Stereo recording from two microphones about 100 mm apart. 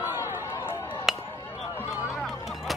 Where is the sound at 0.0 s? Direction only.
20° right (ahead or behind).